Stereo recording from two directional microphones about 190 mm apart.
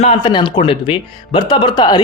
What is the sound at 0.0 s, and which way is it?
Speech, 30° left (ahead or behind).